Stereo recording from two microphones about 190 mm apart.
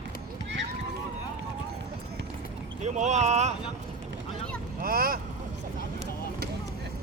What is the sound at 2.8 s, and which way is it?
Speech, 40° right (ahead or behind).